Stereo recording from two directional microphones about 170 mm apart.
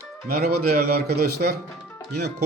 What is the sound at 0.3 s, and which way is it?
Speech, 65° right (ahead or behind).